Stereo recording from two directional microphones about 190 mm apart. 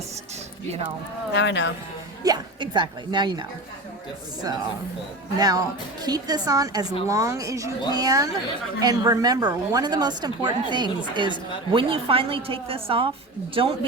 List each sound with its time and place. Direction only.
1.3 s speech: 70° left (ahead or behind)
2.2 s speech: 20° right (ahead or behind)
5.4 s speech: 20° right (ahead or behind)